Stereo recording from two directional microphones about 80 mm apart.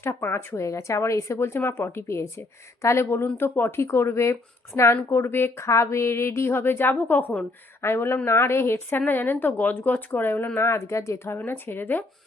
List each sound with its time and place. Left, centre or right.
0.1 s speech: left